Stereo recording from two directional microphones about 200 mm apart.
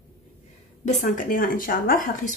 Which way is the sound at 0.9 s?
40° left (ahead or behind).